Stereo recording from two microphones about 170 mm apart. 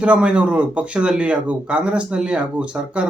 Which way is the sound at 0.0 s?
5° right (ahead or behind).